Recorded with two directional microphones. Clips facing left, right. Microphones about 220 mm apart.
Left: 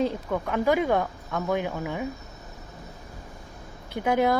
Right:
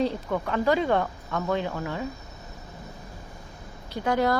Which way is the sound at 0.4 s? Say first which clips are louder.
Left 1 dB; 15° left (ahead or behind).